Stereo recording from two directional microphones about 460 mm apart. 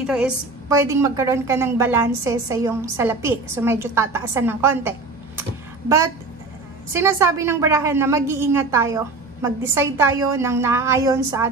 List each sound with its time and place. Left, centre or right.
0.0 s a woman's voice: centre
5.4 s a sound: centre
6.9 s a woman's voice: centre